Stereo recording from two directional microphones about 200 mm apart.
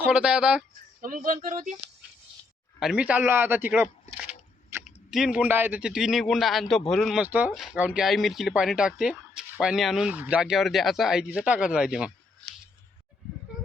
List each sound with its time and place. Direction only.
0.1 s speech: 5° right (ahead or behind)
1.0 s speech: 45° right (ahead or behind)
2.8 s a man's voice: 5° right (ahead or behind)